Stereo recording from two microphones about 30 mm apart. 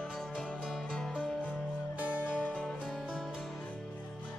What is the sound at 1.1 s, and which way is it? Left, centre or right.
Music, left.